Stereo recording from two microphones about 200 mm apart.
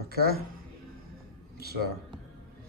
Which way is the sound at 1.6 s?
50° right (ahead or behind).